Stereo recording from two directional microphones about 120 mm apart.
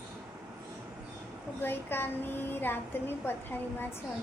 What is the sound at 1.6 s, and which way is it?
A woman's voice, 20° left (ahead or behind).